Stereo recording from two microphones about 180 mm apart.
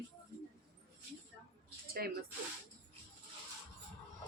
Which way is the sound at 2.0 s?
60° right (ahead or behind).